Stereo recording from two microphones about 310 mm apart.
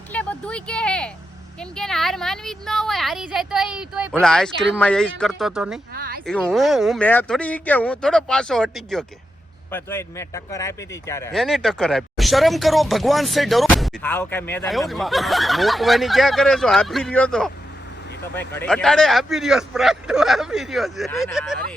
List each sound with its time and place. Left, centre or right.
0.1 s speech: centre
5.9 s a sound: right
6.2 s speech: centre